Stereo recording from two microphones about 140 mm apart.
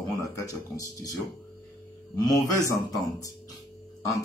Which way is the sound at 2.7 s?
25° left (ahead or behind).